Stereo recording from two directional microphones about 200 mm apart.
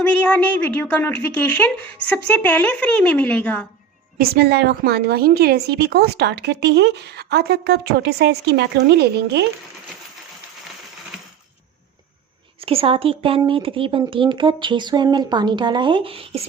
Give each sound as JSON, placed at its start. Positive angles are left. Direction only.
{"t": 0.3, "sound": "speech", "side_deg": 10}
{"t": 4.2, "sound": "a woman's voice", "side_deg": -55}
{"t": 12.5, "sound": "speech", "side_deg": -30}